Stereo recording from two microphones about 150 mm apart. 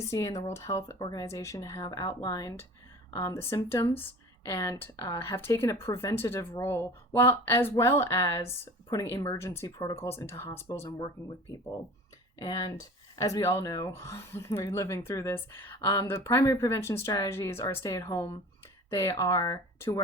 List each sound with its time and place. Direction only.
0.1 s speech: 20° left (ahead or behind)
10.8 s speech: 25° left (ahead or behind)
12.4 s speech: 25° left (ahead or behind)